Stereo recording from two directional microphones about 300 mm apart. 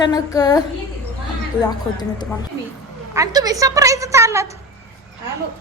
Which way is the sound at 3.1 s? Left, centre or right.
Centre.